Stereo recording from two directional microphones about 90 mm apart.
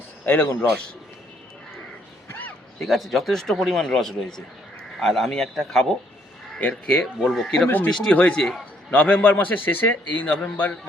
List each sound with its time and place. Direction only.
0.3 s a man's voice: 25° left (ahead or behind)
2.8 s speech: centre (ahead or behind); by 10.8 s 15° left (ahead or behind)